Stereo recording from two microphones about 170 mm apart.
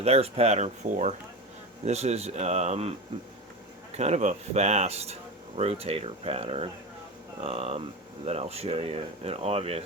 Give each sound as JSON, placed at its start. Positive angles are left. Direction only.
{"t": 0.0, "sound": "speech", "side_deg": -35}
{"t": 3.9, "sound": "speech", "side_deg": -40}